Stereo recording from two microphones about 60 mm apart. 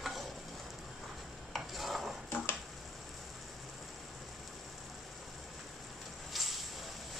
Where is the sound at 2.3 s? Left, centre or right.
Left.